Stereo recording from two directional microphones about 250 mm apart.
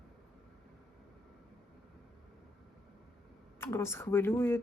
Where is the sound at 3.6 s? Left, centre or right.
Centre.